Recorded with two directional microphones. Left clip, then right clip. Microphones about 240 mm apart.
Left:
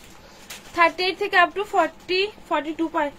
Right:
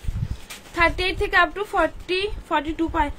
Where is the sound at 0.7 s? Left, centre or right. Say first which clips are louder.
Left 1 dB; centre.